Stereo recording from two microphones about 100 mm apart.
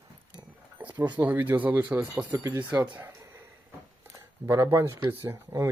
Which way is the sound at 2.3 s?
35° right (ahead or behind).